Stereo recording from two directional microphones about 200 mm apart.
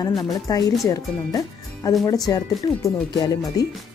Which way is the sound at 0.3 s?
20° left (ahead or behind).